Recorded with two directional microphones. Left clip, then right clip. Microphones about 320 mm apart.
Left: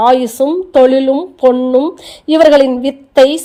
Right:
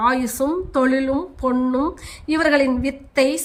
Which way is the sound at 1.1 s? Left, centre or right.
Centre.